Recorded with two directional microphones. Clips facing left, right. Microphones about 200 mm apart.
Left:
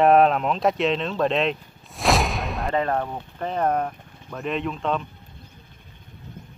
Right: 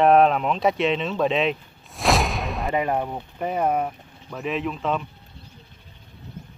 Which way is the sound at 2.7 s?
10° right (ahead or behind).